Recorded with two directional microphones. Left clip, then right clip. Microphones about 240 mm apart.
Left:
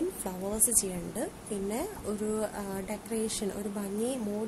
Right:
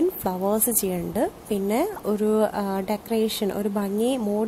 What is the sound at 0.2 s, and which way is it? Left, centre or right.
A woman's voice, right.